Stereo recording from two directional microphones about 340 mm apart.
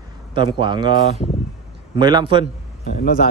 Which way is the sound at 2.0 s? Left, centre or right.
Centre.